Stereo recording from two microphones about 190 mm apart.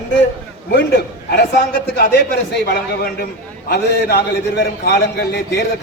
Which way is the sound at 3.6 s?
55° left (ahead or behind).